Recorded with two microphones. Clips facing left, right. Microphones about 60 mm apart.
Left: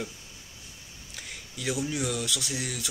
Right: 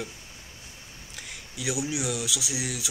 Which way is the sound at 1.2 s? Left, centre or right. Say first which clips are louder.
Right 1 dB; centre.